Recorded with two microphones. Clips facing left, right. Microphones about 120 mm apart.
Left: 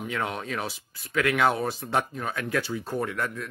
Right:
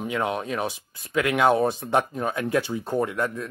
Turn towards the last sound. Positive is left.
turn(degrees=-20)  # may be behind; listen again after turning